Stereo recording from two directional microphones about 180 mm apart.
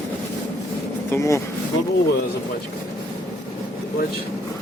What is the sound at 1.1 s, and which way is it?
Speech, 15° left (ahead or behind).